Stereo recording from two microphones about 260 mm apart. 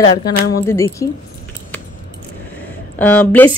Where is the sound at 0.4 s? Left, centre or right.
Left.